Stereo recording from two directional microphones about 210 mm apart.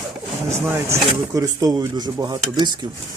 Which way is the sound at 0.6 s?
10° right (ahead or behind).